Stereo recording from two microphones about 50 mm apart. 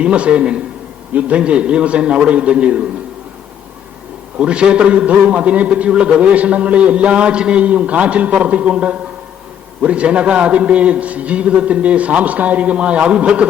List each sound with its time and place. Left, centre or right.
0.0 s a man's voice: right
4.4 s a man's voice: right